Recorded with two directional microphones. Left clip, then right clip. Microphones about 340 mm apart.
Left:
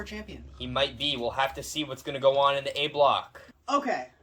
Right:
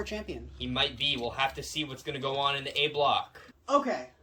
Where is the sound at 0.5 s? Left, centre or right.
Centre.